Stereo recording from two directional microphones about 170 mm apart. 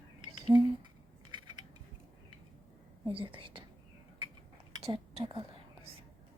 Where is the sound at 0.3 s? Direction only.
30° right (ahead or behind).